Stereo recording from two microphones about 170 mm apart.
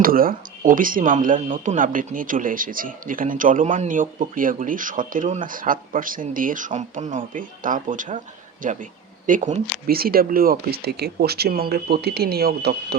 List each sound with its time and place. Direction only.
0.0 s speech: 55° right (ahead or behind)